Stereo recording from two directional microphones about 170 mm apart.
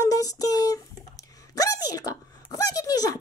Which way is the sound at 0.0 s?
20° left (ahead or behind).